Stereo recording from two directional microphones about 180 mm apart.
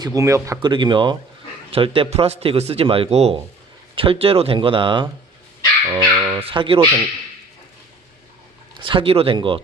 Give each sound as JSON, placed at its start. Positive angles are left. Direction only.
{"t": 0.0, "sound": "speech", "side_deg": -20}
{"t": 5.9, "sound": "dog", "side_deg": -15}
{"t": 6.4, "sound": "speech", "side_deg": -30}
{"t": 8.8, "sound": "speech", "side_deg": -30}